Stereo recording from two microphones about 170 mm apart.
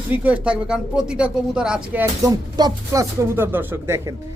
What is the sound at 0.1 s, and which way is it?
Speech, 10° right (ahead or behind).